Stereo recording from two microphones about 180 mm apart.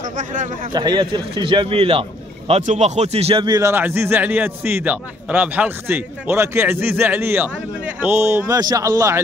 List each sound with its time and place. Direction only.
0.7 s a man's voice: 25° right (ahead or behind)